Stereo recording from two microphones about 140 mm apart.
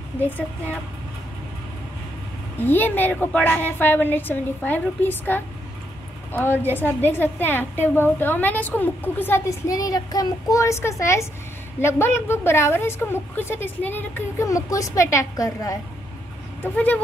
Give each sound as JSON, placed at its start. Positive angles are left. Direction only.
{"t": 0.2, "sound": "a woman's voice", "side_deg": 10}
{"t": 2.6, "sound": "a woman's voice", "side_deg": 15}
{"t": 16.6, "sound": "a woman's voice", "side_deg": 10}